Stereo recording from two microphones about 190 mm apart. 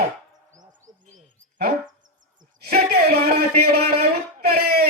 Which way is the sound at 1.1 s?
55° right (ahead or behind).